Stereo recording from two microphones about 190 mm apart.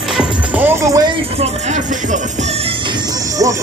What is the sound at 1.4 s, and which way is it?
Speech, 35° right (ahead or behind).